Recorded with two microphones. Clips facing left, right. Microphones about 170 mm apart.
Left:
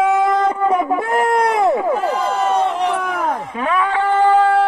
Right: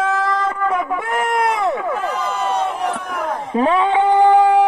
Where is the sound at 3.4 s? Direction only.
30° right (ahead or behind).